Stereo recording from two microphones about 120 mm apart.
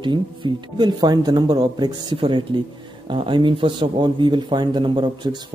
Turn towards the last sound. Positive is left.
turn(degrees=-40)  # may be behind; listen again after turning